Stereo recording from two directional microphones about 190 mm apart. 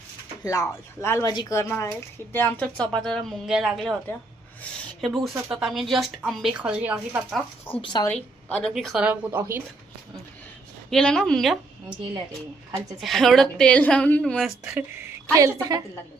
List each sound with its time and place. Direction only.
0.4 s speech: 20° left (ahead or behind); by 3.9 s centre (ahead or behind)
5.0 s a woman's voice: centre (ahead or behind)
7.7 s speech: 25° left (ahead or behind)
8.1 s a woman's voice: 5° left (ahead or behind); by 9.6 s 10° right (ahead or behind)
10.9 s a woman's voice: 5° left (ahead or behind)
13.0 s a woman's voice: centre (ahead or behind)
14.6 s speech: 10° right (ahead or behind)